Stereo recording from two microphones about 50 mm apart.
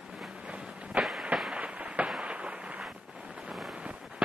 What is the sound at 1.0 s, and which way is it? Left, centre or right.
Fireworks, right.